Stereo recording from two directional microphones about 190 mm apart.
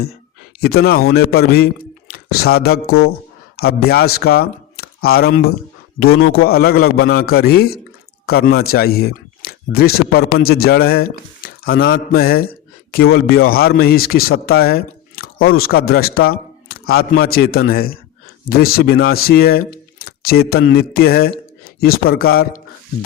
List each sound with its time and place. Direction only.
0.6 s a man's voice: 55° left (ahead or behind)